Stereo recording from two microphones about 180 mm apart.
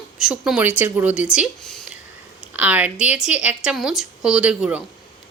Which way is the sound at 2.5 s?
10° right (ahead or behind).